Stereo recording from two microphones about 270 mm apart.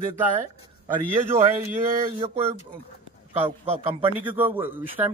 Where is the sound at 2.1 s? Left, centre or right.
Right.